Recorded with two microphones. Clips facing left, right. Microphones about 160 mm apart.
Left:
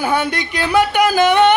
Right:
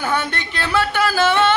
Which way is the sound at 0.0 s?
10° left (ahead or behind).